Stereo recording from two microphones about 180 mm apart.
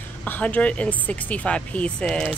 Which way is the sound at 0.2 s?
10° left (ahead or behind).